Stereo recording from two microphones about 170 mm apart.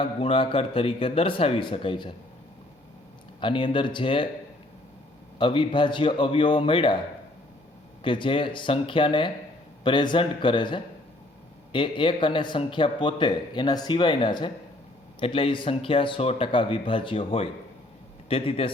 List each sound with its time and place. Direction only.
0.0 s speech: 30° left (ahead or behind)
3.4 s a man's voice: 30° left (ahead or behind)
5.4 s a man's voice: 30° left (ahead or behind)
8.0 s a man's voice: 30° left (ahead or behind)